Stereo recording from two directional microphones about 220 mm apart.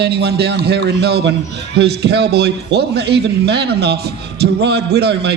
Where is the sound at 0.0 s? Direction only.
50° right (ahead or behind).